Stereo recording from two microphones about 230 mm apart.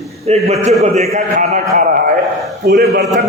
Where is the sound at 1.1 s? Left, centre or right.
Right.